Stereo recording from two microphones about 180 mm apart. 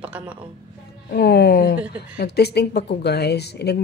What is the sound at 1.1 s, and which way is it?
Speech, 65° left (ahead or behind).